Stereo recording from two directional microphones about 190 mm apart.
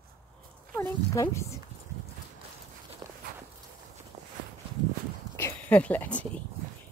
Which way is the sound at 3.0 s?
20° right (ahead or behind).